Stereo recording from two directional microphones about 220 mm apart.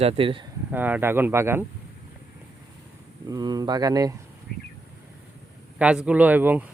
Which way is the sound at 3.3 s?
15° right (ahead or behind).